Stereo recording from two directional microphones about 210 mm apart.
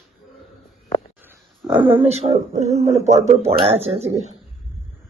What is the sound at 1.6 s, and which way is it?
Speech, 25° right (ahead or behind).